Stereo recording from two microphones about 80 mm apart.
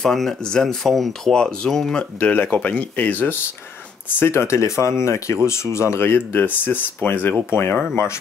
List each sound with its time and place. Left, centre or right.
0.0 s speech: centre
4.2 s speech: left